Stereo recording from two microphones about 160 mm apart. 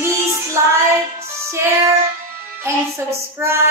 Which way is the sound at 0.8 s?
15° right (ahead or behind).